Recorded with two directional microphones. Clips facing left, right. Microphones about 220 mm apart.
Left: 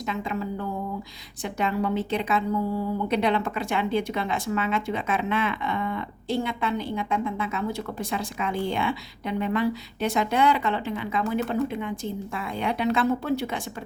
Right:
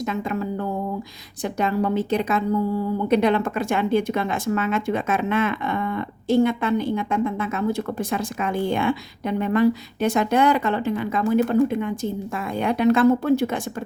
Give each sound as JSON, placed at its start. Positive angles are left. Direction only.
{"t": 0.0, "sound": "speech", "side_deg": -45}